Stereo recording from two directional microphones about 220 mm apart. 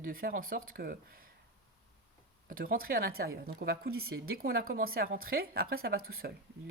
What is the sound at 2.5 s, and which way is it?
Speech, 40° right (ahead or behind).